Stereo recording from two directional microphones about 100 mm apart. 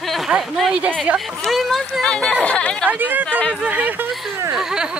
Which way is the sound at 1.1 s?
Centre (ahead or behind).